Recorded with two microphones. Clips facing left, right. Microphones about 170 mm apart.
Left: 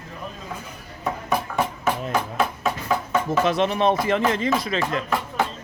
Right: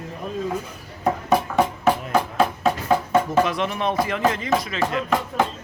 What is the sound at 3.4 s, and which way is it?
Speech, 25° left (ahead or behind).